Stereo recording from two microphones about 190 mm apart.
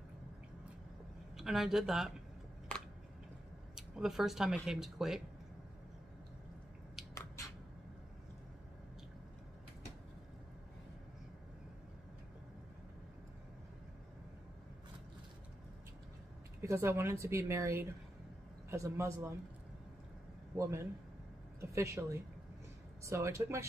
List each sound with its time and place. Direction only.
1.3 s speech: centre (ahead or behind)
3.7 s speech: centre (ahead or behind)
16.6 s speech: 15° right (ahead or behind)
20.5 s speech: 15° right (ahead or behind)